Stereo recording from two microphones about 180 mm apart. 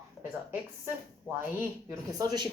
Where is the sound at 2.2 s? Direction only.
25° right (ahead or behind).